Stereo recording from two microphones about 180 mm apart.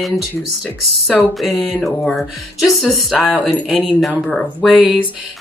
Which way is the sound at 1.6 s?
Centre (ahead or behind).